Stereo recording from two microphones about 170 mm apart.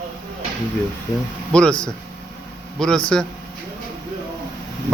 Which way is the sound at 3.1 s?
5° left (ahead or behind).